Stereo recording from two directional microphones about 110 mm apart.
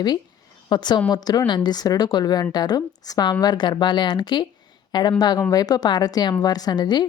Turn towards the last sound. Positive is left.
turn(degrees=40)  # may be behind; listen again after turning